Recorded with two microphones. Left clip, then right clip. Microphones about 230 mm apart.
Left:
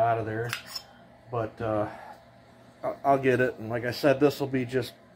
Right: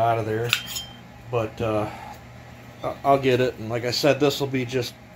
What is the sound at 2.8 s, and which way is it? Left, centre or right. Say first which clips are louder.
A man's voice: right 4 dB; left.